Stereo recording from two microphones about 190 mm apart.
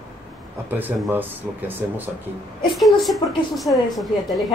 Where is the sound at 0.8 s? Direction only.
10° right (ahead or behind).